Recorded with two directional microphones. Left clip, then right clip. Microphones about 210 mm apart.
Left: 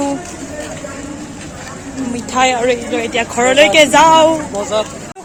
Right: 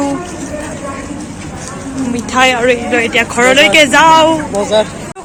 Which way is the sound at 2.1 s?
10° left (ahead or behind).